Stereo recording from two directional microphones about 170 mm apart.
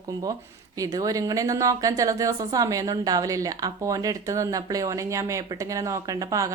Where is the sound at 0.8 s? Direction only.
20° right (ahead or behind).